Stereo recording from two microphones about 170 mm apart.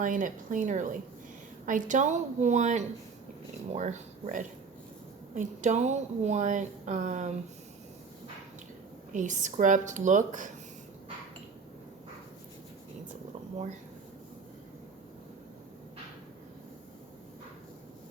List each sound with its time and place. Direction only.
0.0 s speech: 50° right (ahead or behind)
9.1 s speech: 45° right (ahead or behind)